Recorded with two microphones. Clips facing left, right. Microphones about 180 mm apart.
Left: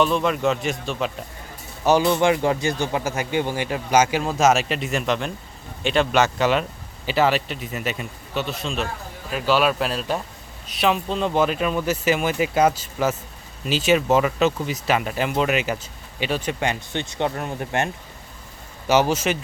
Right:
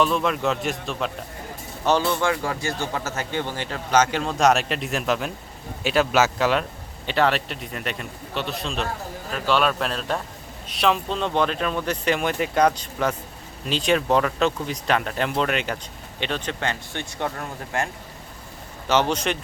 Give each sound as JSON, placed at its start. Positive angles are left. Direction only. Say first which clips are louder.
{"t": 0.0, "sound": "speech", "louder": "left 2 dB", "side_deg": 0}
{"t": 1.8, "sound": "speech", "louder": "left 4 dB", "side_deg": 15}
{"t": 18.9, "sound": "speech", "louder": "left 3 dB", "side_deg": 10}